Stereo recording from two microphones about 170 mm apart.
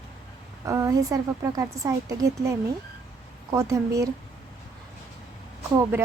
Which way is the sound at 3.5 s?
20° right (ahead or behind).